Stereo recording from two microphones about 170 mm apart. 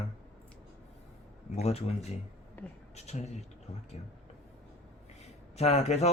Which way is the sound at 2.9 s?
40° left (ahead or behind).